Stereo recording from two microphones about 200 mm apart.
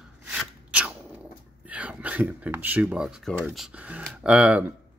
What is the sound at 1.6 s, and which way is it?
Speech, 5° right (ahead or behind).